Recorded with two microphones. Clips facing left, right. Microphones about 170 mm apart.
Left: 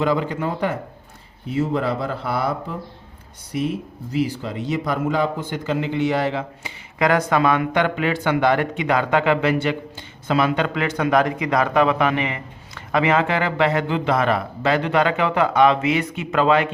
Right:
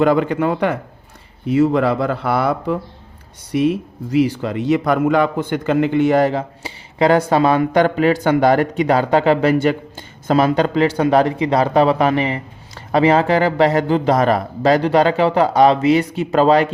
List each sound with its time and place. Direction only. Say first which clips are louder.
0.0 s speech: right 6 dB; 60° right (ahead or behind); by 16.7 s 35° right (ahead or behind)